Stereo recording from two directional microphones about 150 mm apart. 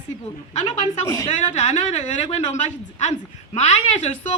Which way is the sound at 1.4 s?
50° left (ahead or behind).